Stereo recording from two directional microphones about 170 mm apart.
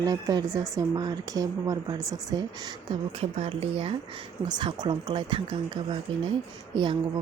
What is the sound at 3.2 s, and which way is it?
Speech, 35° right (ahead or behind).